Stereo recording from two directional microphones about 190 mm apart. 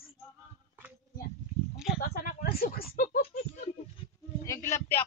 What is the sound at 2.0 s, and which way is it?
Speech, 50° left (ahead or behind).